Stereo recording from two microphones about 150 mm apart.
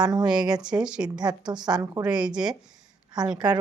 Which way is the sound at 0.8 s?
5° right (ahead or behind).